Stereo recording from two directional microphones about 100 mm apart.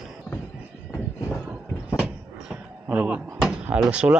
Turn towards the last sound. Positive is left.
turn(degrees=-10)  # may be behind; listen again after turning